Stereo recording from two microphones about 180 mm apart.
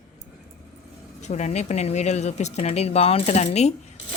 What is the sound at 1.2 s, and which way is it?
Speech, 40° left (ahead or behind).